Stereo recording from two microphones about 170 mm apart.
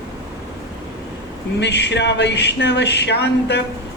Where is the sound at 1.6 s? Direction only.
90° left.